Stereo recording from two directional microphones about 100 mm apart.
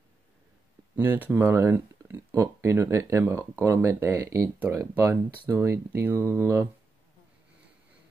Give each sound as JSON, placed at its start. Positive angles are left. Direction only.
{"t": 0.9, "sound": "speech", "side_deg": -20}